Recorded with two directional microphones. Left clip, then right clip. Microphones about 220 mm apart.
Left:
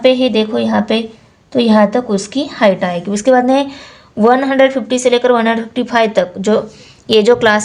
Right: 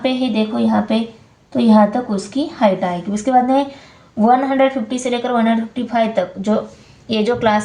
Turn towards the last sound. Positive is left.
turn(degrees=45)  # may be behind; listen again after turning